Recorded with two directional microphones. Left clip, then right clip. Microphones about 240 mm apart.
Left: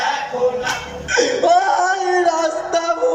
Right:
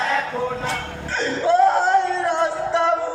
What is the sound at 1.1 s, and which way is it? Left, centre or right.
Music, left.